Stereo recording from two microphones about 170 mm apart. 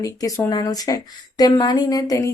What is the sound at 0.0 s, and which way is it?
Speech, 20° left (ahead or behind).